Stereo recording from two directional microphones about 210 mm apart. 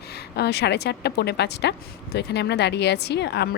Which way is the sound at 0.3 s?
50° left (ahead or behind).